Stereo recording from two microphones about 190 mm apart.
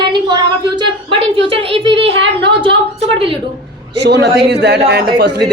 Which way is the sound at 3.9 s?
65° right (ahead or behind).